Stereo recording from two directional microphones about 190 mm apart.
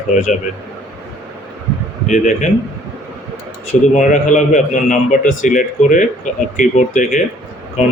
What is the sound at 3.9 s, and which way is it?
A man's voice, 40° left (ahead or behind).